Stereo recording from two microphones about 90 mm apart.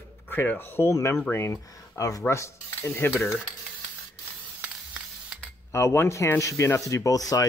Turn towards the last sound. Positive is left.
turn(degrees=40)  # may be behind; listen again after turning